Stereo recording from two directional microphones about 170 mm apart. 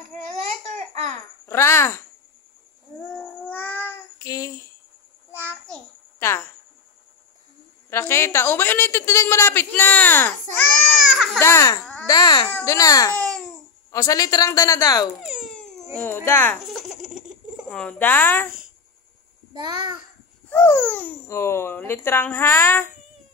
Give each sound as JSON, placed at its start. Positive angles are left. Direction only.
{"t": 1.4, "sound": "a child's voice", "side_deg": 15}
{"t": 3.1, "sound": "babbling", "side_deg": 10}
{"t": 4.2, "sound": "a sound", "side_deg": 20}
{"t": 5.3, "sound": "a sound", "side_deg": 10}
{"t": 7.9, "sound": "a woman's voice", "side_deg": 15}
{"t": 10.6, "sound": "baby cry", "side_deg": 0}
{"t": 11.3, "sound": "a woman's voice", "side_deg": 15}
{"t": 15.2, "sound": "a sound", "side_deg": 0}
{"t": 16.3, "sound": "a woman's voice", "side_deg": 15}
{"t": 16.6, "sound": "baby laughter", "side_deg": 0}
{"t": 17.6, "sound": "a woman's voice", "side_deg": 5}
{"t": 19.5, "sound": "a child's voice", "side_deg": -20}
{"t": 20.4, "sound": "a woman's voice", "side_deg": 15}